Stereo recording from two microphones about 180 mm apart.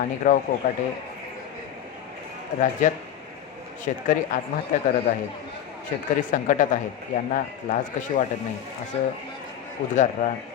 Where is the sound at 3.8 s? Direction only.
45° left (ahead or behind).